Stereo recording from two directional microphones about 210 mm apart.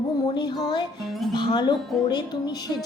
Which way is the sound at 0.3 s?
20° left (ahead or behind).